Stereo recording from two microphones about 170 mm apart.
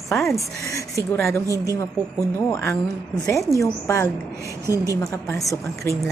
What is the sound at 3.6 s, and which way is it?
Speech, 20° left (ahead or behind).